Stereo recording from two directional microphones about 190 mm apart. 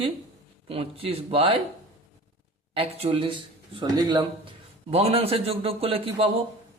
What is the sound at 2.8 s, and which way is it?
A man's voice, 30° right (ahead or behind).